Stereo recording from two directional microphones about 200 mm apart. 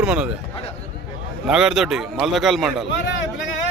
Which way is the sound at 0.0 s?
5° right (ahead or behind).